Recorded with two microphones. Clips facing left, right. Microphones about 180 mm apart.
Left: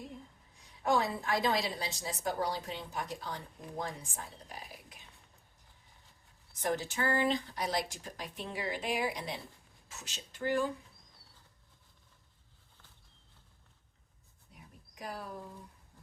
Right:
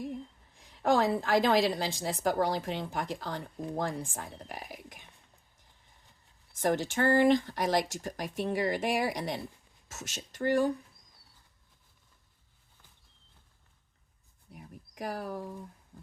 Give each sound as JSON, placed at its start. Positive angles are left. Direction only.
{"t": 0.8, "sound": "a woman's voice", "side_deg": -80}
{"t": 6.6, "sound": "speech", "side_deg": -80}
{"t": 7.5, "sound": "speech", "side_deg": -50}
{"t": 10.4, "sound": "speech", "side_deg": -60}
{"t": 14.5, "sound": "bird", "side_deg": -65}